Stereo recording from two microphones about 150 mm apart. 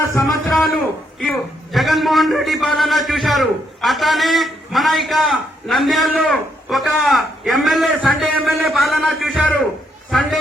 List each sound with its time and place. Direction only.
0.0 s a man's voice: 20° left (ahead or behind)
0.3 s a man's voice: centre (ahead or behind)